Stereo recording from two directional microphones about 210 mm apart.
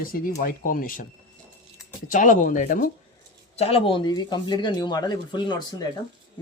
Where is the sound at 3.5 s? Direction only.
30° left (ahead or behind).